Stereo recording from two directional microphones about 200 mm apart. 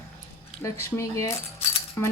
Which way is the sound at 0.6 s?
15° left (ahead or behind).